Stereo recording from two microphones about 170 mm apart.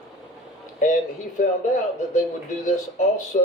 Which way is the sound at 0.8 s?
45° left (ahead or behind).